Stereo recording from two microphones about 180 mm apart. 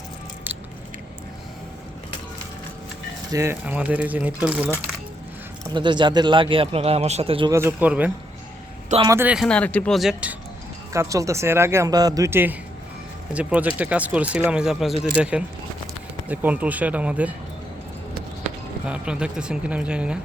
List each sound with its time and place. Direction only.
0.5 s biting: 10° right (ahead or behind)
3.3 s speech: 15° right (ahead or behind)
5.7 s speech: 25° right (ahead or behind)
7.5 s speech: 10° right (ahead or behind)
9.5 s speech: 5° left (ahead or behind)
10.9 s speech: 15° right (ahead or behind)
18.9 s speech: 5° right (ahead or behind)